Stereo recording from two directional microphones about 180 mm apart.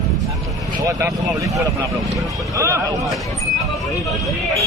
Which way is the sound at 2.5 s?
15° right (ahead or behind).